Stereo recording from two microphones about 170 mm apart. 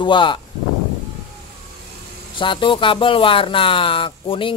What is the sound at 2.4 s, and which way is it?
Speech, 30° left (ahead or behind).